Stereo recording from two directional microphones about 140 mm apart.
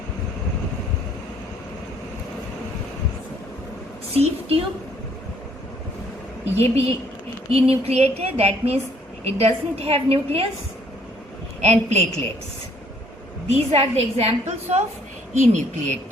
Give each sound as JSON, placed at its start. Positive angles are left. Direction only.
{"t": 4.1, "sound": "a woman's voice", "side_deg": -45}
{"t": 6.6, "sound": "a woman's voice", "side_deg": -50}
{"t": 11.6, "sound": "a woman's voice", "side_deg": -55}
{"t": 13.5, "sound": "a woman's voice", "side_deg": -45}